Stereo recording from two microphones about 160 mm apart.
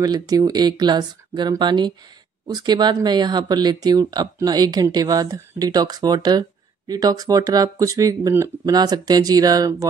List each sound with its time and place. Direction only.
0.0 s speech: 25° right (ahead or behind)